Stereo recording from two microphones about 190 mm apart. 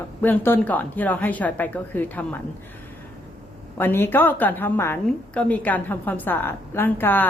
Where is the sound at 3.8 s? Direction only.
10° left (ahead or behind).